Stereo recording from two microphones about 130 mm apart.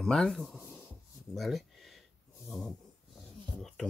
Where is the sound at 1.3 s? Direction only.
Centre (ahead or behind).